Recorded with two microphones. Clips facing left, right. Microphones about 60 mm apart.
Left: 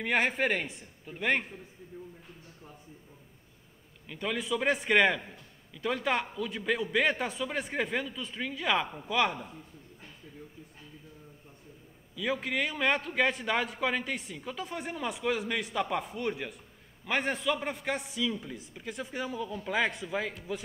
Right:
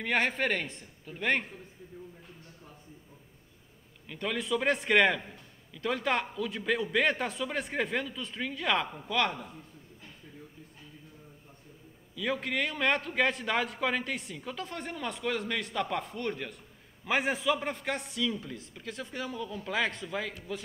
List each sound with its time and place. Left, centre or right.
0.0 s a man's voice: centre
4.1 s a man's voice: centre
12.2 s a man's voice: centre
17.0 s a man's voice: centre